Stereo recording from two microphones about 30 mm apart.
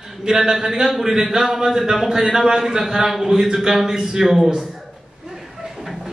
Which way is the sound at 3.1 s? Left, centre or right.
Centre.